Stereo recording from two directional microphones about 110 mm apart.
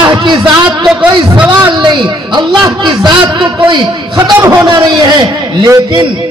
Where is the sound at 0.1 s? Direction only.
45° right (ahead or behind).